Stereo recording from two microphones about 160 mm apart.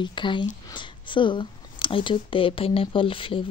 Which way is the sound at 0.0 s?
30° left (ahead or behind).